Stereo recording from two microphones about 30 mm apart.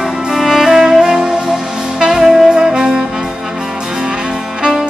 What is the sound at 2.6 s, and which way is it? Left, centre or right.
Music, centre.